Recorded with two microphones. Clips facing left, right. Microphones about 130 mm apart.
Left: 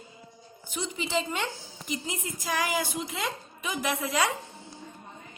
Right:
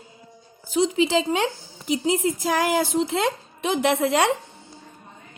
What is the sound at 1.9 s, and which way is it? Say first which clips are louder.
Speech: right 13 dB; 80° right.